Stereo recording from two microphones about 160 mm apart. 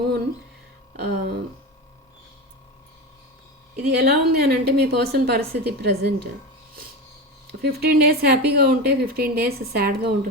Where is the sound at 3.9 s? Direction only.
75° right (ahead or behind).